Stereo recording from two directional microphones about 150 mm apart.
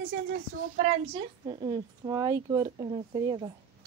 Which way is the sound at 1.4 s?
35° right (ahead or behind).